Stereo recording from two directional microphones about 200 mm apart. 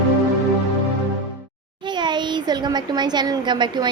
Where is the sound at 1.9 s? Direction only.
20° right (ahead or behind).